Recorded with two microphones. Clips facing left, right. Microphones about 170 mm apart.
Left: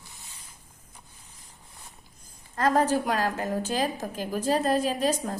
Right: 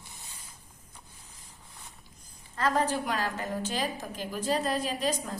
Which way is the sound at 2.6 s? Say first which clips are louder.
Left 5 dB; 45° left (ahead or behind).